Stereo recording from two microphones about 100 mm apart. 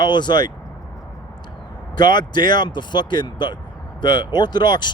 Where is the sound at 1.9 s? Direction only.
45° left (ahead or behind).